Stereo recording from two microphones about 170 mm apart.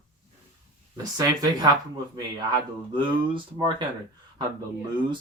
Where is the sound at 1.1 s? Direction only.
25° right (ahead or behind).